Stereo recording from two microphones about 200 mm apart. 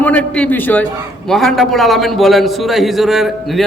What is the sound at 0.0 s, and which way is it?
A man's voice, 5° left (ahead or behind).